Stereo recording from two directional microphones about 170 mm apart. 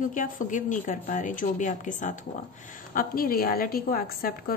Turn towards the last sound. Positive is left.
turn(degrees=60)  # may be behind; listen again after turning